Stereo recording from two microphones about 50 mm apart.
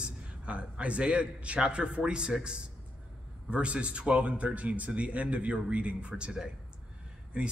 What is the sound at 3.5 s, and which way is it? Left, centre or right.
Speech, right.